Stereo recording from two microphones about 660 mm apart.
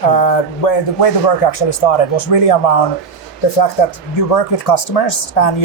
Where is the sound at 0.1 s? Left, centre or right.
Left.